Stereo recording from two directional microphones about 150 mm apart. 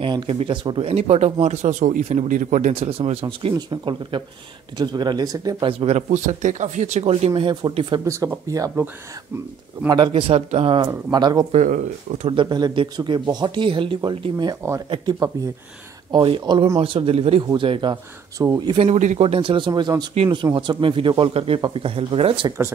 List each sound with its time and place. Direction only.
0.0 s speech: 35° right (ahead or behind)
5.7 s speech: 40° right (ahead or behind)
8.0 s speech: 20° right (ahead or behind)
9.8 s speech: 30° right (ahead or behind)
11.5 s speech: 55° right (ahead or behind)
12.3 s speech: 30° right (ahead or behind)
18.4 s speech: 20° right (ahead or behind)
18.8 s speech: 50° right (ahead or behind)